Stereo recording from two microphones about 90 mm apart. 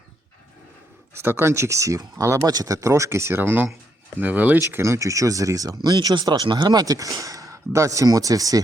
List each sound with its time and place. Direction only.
1.1 s speech: 25° right (ahead or behind); by 6.4 s 45° right (ahead or behind)
6.4 s speech: 55° right (ahead or behind); by 8.6 s 40° right (ahead or behind)